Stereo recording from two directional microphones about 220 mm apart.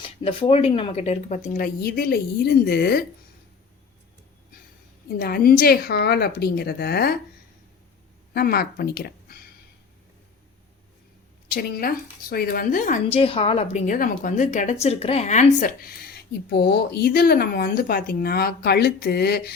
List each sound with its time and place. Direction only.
0.3 s a woman's voice: 25° left (ahead or behind); by 3.0 s 45° left (ahead or behind)
5.2 s a woman's voice: 45° left (ahead or behind)
8.3 s speech: 45° left (ahead or behind)
11.5 s a woman's voice: 45° left (ahead or behind)